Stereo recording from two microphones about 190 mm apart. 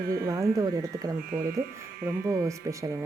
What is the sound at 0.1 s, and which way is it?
Speech, 15° right (ahead or behind).